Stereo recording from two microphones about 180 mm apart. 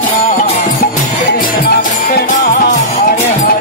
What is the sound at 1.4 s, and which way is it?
Music, 50° left (ahead or behind).